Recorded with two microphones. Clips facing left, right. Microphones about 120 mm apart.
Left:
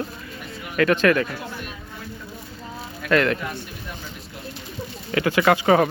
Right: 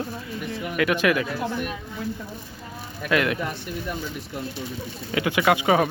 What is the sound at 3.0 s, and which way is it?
Speech, 10° right (ahead or behind).